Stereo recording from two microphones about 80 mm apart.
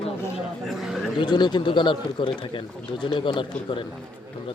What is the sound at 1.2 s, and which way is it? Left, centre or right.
Speech, left.